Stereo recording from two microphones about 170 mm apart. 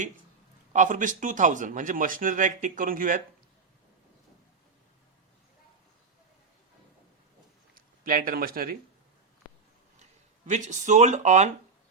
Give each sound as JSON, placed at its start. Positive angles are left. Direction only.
{"t": 0.7, "sound": "speech", "side_deg": -45}
{"t": 7.8, "sound": "speech", "side_deg": -55}
{"t": 10.0, "sound": "speech", "side_deg": -45}